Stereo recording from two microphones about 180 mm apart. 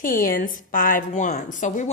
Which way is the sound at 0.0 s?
50° left (ahead or behind).